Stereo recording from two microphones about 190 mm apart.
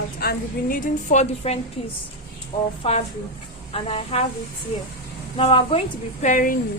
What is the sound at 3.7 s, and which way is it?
Speech, 30° left (ahead or behind).